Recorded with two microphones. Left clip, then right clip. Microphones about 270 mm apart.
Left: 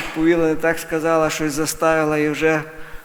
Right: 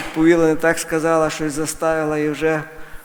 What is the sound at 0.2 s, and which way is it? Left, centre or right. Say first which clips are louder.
A man's voice: right 3 dB; centre.